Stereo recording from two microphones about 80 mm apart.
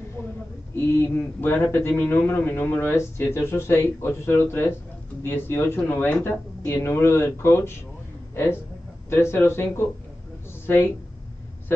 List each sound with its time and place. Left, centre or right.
0.7 s speech: left
9.1 s speech: left